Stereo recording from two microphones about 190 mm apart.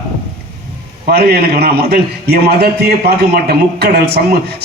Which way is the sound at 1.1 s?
55° right (ahead or behind).